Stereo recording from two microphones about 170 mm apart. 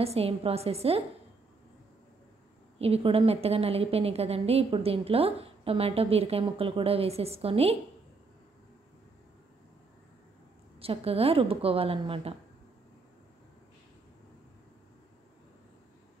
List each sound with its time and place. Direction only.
0.0 s a woman's voice: 35° right (ahead or behind)
2.8 s a woman's voice: 35° right (ahead or behind)
10.8 s a woman's voice: 35° right (ahead or behind)